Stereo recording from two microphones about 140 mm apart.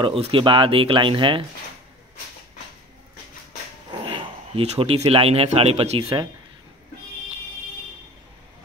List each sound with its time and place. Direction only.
0.0 s speech: 40° right (ahead or behind)
3.9 s speech: 35° right (ahead or behind)